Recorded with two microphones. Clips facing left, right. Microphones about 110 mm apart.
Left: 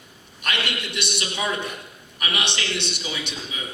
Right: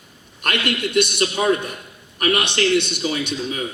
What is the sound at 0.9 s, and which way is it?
A man's voice, 50° right (ahead or behind).